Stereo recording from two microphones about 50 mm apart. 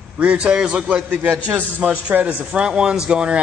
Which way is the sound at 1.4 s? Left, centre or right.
Right.